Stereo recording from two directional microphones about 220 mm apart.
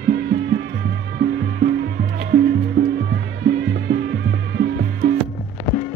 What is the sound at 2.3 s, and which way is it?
Music, 50° right (ahead or behind).